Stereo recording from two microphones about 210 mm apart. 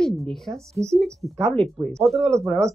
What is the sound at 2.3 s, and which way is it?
Speech, 15° right (ahead or behind).